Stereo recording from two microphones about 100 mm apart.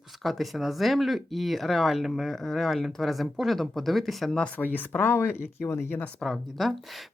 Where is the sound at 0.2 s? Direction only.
Centre (ahead or behind).